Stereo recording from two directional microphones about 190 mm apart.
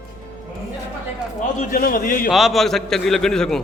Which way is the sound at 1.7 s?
45° left (ahead or behind).